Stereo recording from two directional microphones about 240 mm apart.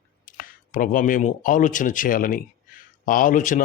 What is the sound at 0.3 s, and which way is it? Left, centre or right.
A man's voice, left.